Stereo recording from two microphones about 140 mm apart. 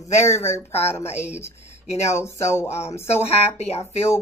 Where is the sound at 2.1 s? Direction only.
20° left (ahead or behind).